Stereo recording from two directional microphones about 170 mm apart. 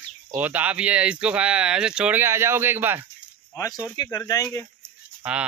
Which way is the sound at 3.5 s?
20° left (ahead or behind).